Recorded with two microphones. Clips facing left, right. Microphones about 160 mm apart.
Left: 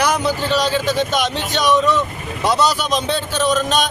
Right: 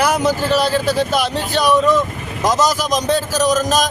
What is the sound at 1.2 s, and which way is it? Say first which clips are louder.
Speech: right 2 dB; 35° right (ahead or behind).